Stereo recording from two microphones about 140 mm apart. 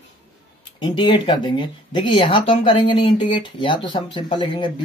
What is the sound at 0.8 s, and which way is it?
Speech, 35° left (ahead or behind).